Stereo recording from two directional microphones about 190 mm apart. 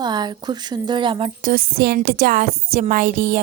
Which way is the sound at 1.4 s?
50° right (ahead or behind).